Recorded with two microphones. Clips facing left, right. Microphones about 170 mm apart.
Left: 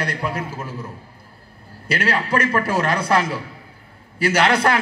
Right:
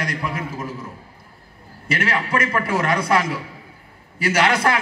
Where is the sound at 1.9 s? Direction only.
35° left (ahead or behind).